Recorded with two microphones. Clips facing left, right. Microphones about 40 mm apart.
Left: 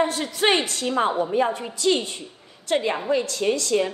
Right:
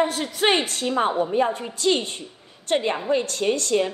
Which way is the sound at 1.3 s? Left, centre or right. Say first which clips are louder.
Even; right.